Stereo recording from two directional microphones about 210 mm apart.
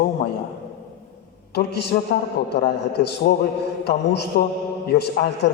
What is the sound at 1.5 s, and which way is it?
A man's voice, 50° left (ahead or behind).